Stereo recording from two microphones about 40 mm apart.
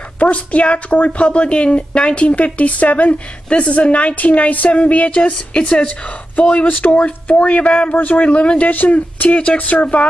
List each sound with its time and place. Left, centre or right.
0.2 s speech: left
7.9 s speech: left